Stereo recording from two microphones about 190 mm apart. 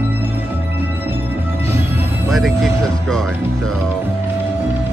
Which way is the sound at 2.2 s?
Centre (ahead or behind).